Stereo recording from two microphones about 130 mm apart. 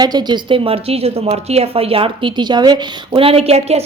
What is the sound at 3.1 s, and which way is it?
Speech, 50° right (ahead or behind).